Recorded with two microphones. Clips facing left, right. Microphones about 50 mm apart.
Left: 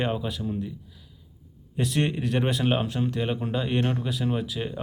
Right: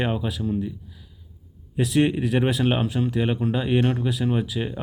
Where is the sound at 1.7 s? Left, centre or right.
Centre.